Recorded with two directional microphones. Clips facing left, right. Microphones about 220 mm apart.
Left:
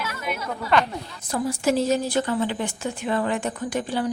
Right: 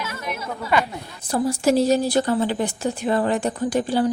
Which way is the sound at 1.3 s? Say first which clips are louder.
Right 4 dB; 35° right (ahead or behind).